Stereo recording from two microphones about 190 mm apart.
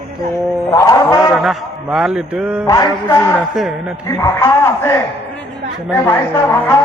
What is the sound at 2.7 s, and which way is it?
Music, 20° left (ahead or behind).